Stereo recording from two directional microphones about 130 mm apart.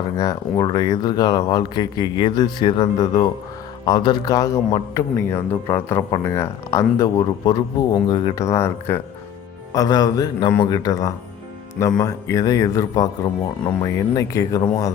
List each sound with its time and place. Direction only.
0.2 s a man's voice: 30° left (ahead or behind)
8.4 s a man's voice: 20° left (ahead or behind)